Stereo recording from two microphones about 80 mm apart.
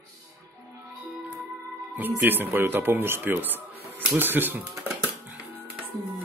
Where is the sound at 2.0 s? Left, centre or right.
Right.